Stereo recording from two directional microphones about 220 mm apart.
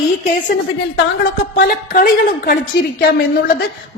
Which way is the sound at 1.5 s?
40° left (ahead or behind).